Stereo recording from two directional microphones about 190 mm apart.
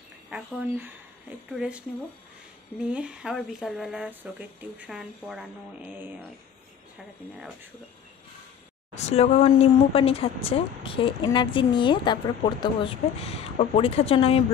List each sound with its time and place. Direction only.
0.3 s speech: 10° right (ahead or behind)
8.9 s speech: 35° left (ahead or behind)